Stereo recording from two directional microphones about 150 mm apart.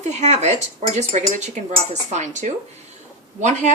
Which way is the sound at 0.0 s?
50° right (ahead or behind).